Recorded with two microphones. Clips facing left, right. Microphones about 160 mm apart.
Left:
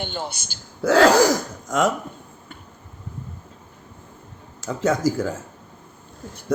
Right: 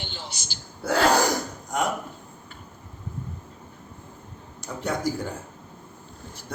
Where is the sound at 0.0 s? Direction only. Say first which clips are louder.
Left 9 dB; 55° left (ahead or behind).